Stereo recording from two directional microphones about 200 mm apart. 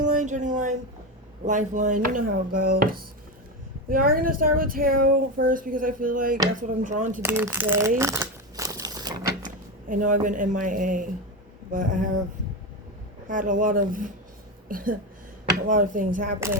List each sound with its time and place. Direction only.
0.2 s speech: 40° right (ahead or behind)
7.2 s crumpling: 10° right (ahead or behind)
9.9 s speech: 40° right (ahead or behind)
13.2 s speech: 40° right (ahead or behind)